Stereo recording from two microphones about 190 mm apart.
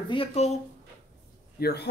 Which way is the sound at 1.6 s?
55° left (ahead or behind).